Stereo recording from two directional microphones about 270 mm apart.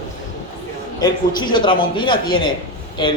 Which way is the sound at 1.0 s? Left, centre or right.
Centre.